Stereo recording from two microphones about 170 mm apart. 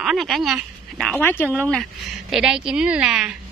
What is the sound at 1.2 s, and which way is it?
Speech, 10° left (ahead or behind).